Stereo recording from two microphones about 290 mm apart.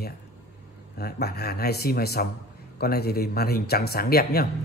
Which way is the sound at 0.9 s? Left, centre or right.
Left.